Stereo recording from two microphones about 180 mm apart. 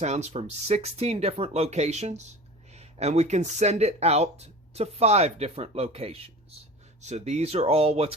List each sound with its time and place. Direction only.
0.0 s speech: 40° right (ahead or behind)